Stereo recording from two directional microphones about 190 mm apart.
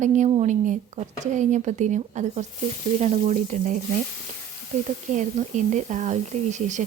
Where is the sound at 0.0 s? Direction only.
35° right (ahead or behind).